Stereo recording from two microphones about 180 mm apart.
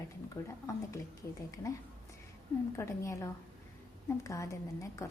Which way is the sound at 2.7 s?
15° left (ahead or behind).